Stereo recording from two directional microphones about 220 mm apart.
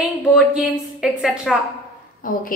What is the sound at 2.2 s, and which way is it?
Speech, 40° left (ahead or behind).